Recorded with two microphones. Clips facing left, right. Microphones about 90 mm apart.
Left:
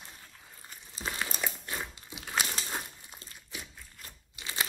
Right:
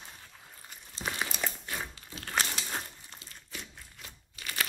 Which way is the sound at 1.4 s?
5° left (ahead or behind).